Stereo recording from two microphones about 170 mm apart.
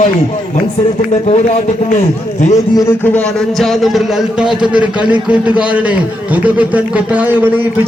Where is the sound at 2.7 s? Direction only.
20° left (ahead or behind).